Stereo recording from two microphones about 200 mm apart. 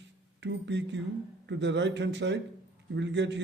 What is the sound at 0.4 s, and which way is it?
A man's voice, 60° right (ahead or behind).